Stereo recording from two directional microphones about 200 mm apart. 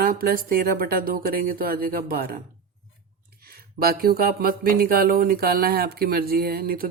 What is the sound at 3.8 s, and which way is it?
Speech, 50° right (ahead or behind).